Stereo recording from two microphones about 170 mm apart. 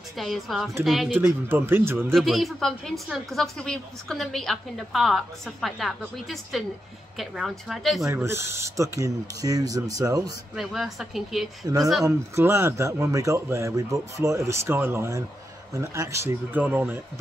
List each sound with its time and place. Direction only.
0.2 s speech: centre (ahead or behind)
1.1 s speech: 10° right (ahead or behind)
2.0 s speech: centre (ahead or behind)
8.0 s speech: 15° right (ahead or behind)
10.5 s speech: centre (ahead or behind)
11.6 s speech: 20° right (ahead or behind)